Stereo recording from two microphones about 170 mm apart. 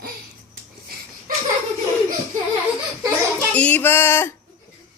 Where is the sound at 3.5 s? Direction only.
10° left (ahead or behind).